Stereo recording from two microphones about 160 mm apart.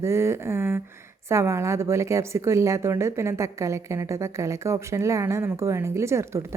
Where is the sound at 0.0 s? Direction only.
15° right (ahead or behind).